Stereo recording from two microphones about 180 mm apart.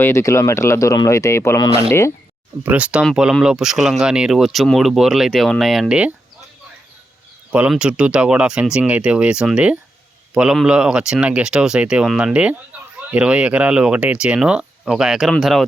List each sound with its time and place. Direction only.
0.0 s speech: 15° left (ahead or behind)
2.6 s speech: 5° right (ahead or behind)
7.5 s speech: 5° right (ahead or behind)